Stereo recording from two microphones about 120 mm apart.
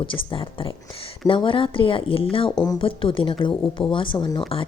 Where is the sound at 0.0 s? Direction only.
45° left (ahead or behind).